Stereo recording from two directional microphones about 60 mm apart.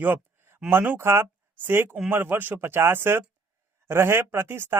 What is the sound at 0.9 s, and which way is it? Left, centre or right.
Speech, right.